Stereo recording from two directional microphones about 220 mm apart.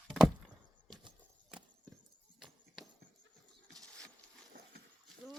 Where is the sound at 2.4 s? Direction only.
Centre (ahead or behind).